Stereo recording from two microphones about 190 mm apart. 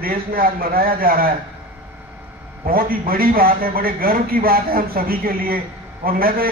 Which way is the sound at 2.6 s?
50° right (ahead or behind).